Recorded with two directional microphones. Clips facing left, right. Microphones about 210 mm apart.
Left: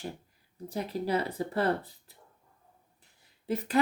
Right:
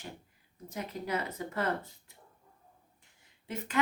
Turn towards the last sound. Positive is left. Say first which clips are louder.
# left 8 dB
turn(degrees=35)  # may be behind; listen again after turning